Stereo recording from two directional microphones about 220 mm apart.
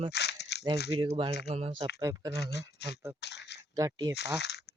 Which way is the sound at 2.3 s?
50° left (ahead or behind).